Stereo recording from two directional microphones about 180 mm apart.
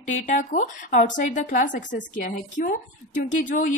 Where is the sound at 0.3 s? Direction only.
45° left (ahead or behind).